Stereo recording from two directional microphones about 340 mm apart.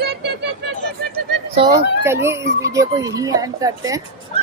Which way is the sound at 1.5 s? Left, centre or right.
Centre.